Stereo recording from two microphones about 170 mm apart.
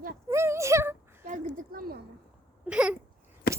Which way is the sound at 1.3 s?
55° right (ahead or behind).